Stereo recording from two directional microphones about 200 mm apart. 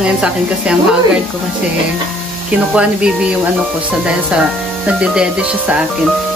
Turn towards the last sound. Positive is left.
turn(degrees=-5)  # may be behind; listen again after turning